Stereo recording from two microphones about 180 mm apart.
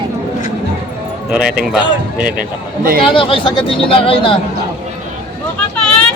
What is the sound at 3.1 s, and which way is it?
Speech, 30° left (ahead or behind).